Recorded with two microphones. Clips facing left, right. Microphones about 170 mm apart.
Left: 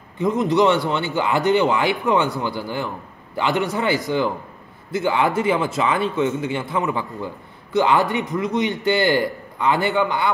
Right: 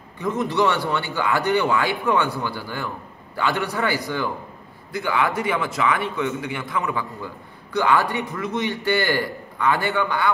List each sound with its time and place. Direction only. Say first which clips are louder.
0.2 s a man's voice: left 4 dB; 20° left (ahead or behind)